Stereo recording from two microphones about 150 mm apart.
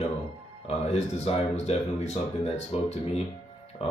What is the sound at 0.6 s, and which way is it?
Speech, 45° left (ahead or behind).